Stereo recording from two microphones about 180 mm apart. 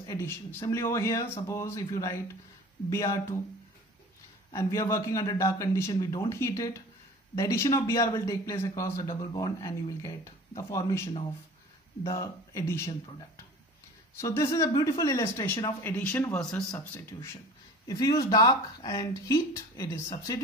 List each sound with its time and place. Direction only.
0.0 s speech: 15° left (ahead or behind)
4.5 s speech: 15° left (ahead or behind)
14.2 s speech: 15° left (ahead or behind)